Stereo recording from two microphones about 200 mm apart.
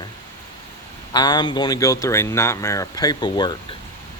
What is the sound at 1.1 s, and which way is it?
Speech, 20° left (ahead or behind).